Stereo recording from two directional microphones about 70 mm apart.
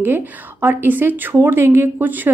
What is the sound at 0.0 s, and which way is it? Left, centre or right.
A woman's voice, right.